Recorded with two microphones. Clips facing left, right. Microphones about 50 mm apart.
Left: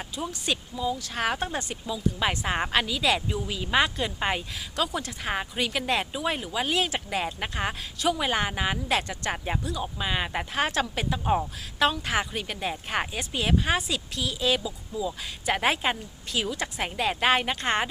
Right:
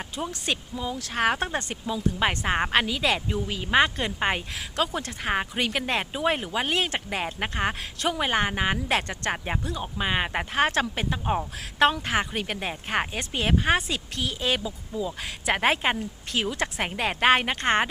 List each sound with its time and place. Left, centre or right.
0.2 s speech: right